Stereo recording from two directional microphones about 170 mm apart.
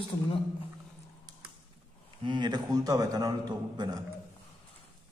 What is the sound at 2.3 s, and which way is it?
A man's voice, 25° right (ahead or behind).